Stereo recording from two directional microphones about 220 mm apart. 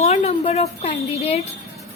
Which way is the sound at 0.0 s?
30° left (ahead or behind).